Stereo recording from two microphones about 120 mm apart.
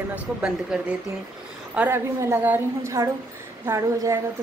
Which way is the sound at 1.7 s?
20° right (ahead or behind).